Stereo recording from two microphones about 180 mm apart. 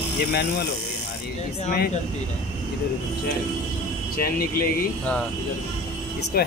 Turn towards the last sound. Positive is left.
turn(degrees=60)  # may be behind; listen again after turning